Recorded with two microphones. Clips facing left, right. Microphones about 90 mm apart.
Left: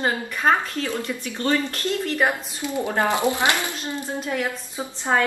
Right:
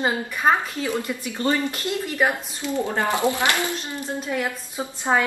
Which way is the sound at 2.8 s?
20° left (ahead or behind).